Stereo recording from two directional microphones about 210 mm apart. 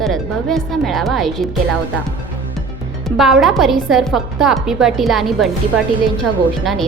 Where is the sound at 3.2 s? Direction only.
Centre (ahead or behind).